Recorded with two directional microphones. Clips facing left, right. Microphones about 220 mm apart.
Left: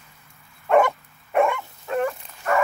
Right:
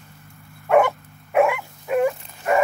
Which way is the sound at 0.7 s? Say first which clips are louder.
Right 1 dB; 5° right (ahead or behind).